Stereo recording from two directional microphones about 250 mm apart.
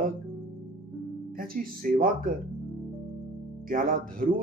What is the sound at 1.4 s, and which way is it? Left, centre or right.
Speech, right.